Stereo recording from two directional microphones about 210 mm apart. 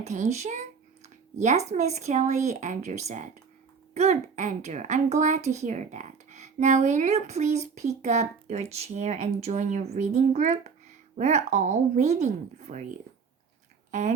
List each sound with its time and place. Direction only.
0.0 s a woman's voice: 35° right (ahead or behind)